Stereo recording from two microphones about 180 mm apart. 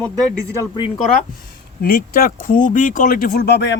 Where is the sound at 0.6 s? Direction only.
30° left (ahead or behind).